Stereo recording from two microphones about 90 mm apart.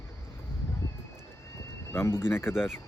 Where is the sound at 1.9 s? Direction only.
30° left (ahead or behind).